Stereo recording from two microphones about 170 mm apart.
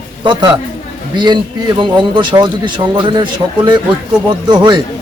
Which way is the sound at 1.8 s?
25° right (ahead or behind).